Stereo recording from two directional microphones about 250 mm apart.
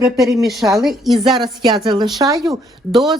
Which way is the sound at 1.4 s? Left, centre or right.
Centre.